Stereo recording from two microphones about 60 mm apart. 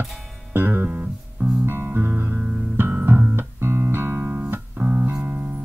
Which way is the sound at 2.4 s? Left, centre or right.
Right.